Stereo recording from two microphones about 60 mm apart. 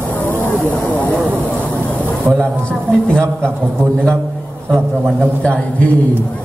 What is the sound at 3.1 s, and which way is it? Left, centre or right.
Speech, centre.